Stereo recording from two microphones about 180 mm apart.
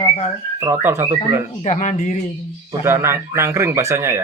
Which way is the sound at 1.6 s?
40° left (ahead or behind).